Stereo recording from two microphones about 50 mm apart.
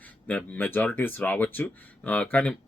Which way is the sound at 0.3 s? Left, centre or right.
Left.